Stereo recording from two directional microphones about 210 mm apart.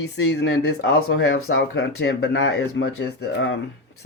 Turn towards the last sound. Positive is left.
turn(degrees=55)  # may be behind; listen again after turning